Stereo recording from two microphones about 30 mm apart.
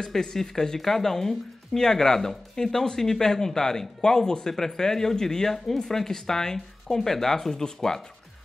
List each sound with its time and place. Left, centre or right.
0.0 s speech: centre